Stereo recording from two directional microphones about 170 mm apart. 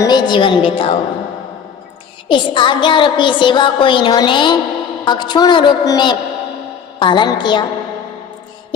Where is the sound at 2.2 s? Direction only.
30° left (ahead or behind).